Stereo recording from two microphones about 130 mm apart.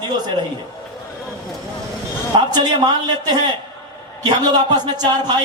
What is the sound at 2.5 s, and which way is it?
Speech, 30° right (ahead or behind).